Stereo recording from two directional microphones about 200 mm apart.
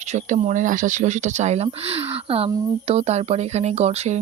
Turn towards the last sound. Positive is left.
turn(degrees=-35)  # may be behind; listen again after turning